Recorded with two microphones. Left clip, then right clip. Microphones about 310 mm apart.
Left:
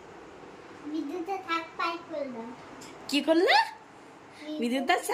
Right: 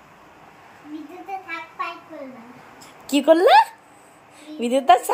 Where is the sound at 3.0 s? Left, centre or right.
Centre.